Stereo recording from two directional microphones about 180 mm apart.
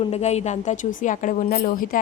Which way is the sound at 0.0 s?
35° left (ahead or behind).